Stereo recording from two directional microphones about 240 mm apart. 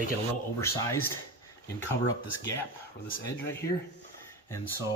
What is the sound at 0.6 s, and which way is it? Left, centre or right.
Speech, centre.